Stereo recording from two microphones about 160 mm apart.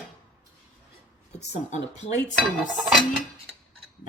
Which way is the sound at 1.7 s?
50° left (ahead or behind).